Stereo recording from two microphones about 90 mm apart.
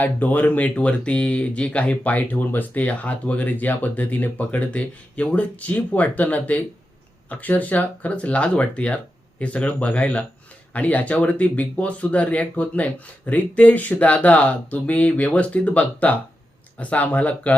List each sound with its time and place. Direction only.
0.0 s speech: 20° left (ahead or behind)